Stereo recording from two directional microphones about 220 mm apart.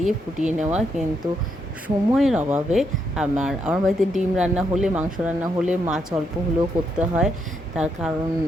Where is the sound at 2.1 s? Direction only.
5° right (ahead or behind).